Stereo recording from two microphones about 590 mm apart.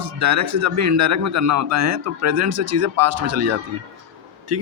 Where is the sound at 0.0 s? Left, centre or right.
Right.